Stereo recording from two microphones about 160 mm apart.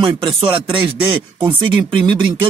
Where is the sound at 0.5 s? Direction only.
35° right (ahead or behind).